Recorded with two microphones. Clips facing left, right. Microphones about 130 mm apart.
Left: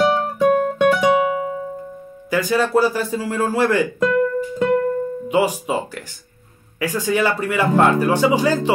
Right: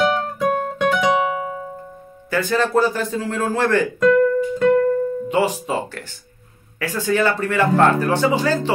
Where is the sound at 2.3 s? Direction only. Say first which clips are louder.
Left 1 dB; 10° left (ahead or behind).